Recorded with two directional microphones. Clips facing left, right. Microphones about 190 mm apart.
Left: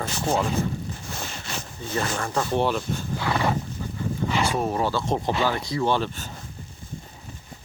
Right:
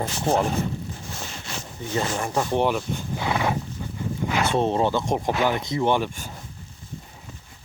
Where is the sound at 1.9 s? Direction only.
20° right (ahead or behind).